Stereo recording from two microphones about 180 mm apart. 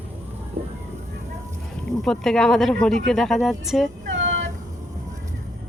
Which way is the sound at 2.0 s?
Centre (ahead or behind).